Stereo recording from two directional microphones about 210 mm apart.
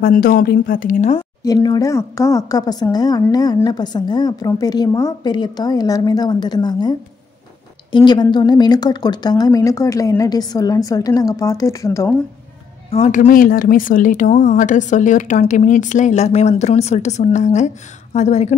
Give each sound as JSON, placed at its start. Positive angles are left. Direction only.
{"t": 0.0, "sound": "a woman's voice", "side_deg": 45}
{"t": 1.4, "sound": "a woman's voice", "side_deg": 15}
{"t": 12.9, "sound": "speech", "side_deg": 30}